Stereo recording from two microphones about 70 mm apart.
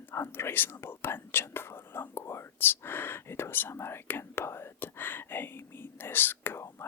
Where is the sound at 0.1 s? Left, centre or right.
Left.